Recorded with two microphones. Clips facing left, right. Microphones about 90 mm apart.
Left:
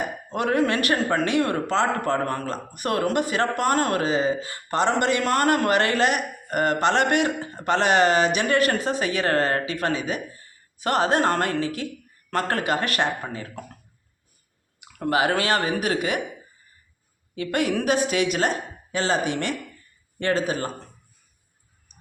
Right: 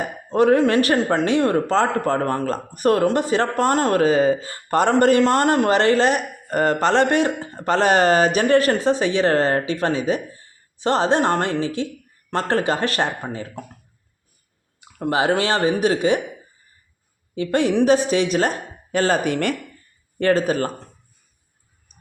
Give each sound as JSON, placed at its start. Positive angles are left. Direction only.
{"t": 0.3, "sound": "a man's voice", "side_deg": -35}
{"t": 4.0, "sound": "a man's voice", "side_deg": -45}
{"t": 14.8, "sound": "speech", "side_deg": -30}
{"t": 17.3, "sound": "a man's voice", "side_deg": -30}